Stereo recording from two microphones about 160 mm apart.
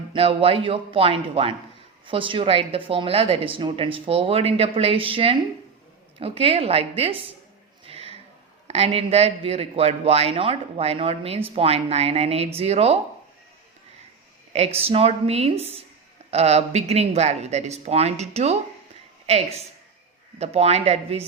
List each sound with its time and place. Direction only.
0.1 s a man's voice: 35° right (ahead or behind)
7.9 s a sound: 40° right (ahead or behind)
8.6 s a man's voice: 40° right (ahead or behind)
14.5 s a man's voice: 40° right (ahead or behind)